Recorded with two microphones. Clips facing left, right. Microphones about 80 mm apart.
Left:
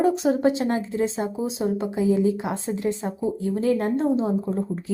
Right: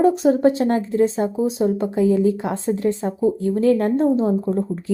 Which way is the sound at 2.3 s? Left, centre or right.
Centre.